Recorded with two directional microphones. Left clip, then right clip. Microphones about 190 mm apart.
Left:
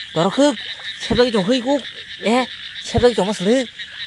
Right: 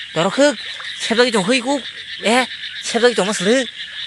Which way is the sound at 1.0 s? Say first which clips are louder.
Right 1 dB; centre (ahead or behind).